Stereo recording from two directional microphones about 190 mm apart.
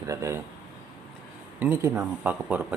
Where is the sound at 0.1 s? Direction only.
15° right (ahead or behind).